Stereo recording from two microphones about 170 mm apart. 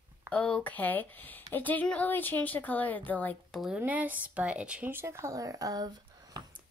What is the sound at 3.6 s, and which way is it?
Speech, 10° right (ahead or behind).